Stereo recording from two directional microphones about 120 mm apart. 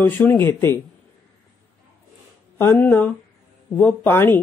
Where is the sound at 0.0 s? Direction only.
15° left (ahead or behind).